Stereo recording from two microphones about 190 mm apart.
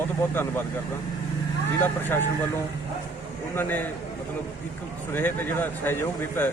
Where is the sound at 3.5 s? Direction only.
10° left (ahead or behind).